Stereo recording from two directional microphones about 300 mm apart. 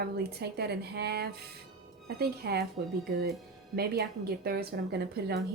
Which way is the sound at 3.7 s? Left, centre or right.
Right.